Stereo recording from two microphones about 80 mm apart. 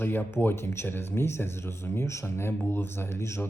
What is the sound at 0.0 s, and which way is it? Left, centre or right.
Speech, left.